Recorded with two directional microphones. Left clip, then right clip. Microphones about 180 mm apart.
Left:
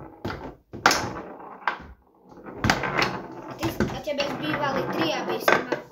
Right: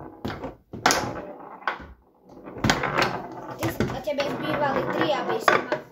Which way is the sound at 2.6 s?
25° right (ahead or behind).